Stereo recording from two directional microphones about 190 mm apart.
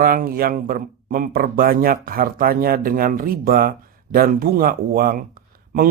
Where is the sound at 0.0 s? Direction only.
50° right (ahead or behind).